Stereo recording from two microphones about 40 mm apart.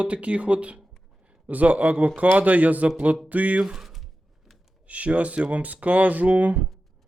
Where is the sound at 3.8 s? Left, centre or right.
Centre.